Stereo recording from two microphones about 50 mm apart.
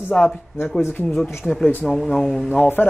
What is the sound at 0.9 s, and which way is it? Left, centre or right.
Speech, left.